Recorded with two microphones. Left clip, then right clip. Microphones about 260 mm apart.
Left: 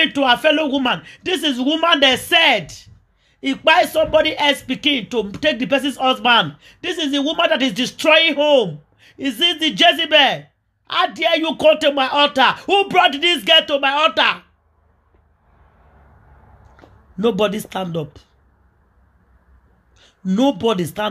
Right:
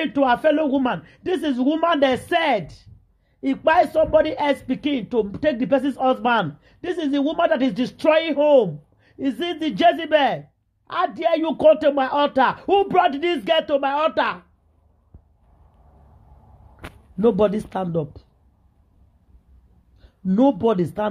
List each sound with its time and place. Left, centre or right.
0.0 s speech: centre
17.2 s speech: centre
20.0 s speech: centre